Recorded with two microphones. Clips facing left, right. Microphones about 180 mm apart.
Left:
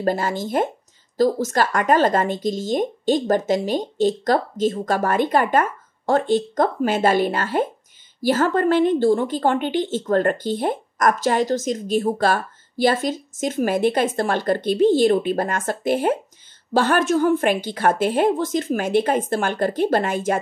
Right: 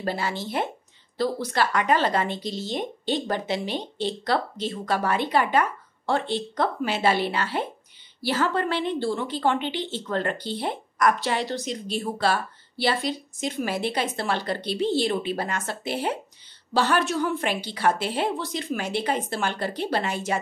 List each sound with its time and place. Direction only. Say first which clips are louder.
0.0 s a woman's voice: left 6 dB; 45° left (ahead or behind)